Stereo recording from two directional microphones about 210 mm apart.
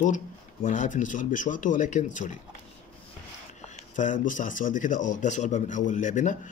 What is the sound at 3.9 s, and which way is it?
Speech, 35° left (ahead or behind).